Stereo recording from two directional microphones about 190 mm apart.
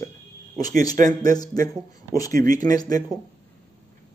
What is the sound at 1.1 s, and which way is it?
A man's voice, 20° left (ahead or behind).